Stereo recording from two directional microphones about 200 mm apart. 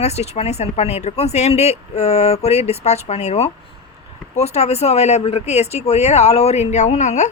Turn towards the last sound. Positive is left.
turn(degrees=35)  # may be behind; listen again after turning